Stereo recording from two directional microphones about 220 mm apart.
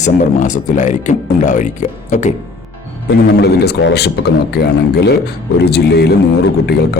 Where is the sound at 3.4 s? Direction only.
50° left (ahead or behind).